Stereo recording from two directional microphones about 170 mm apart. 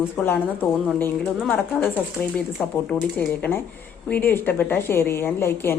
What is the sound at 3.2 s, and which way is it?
A woman's voice, 10° left (ahead or behind).